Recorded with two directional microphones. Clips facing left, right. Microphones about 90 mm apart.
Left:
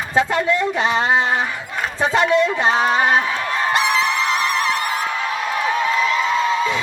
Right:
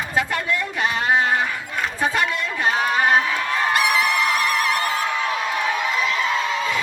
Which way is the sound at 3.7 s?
25° left (ahead or behind).